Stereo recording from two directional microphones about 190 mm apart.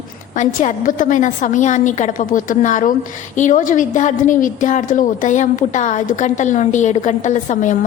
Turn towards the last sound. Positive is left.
turn(degrees=40)  # may be behind; listen again after turning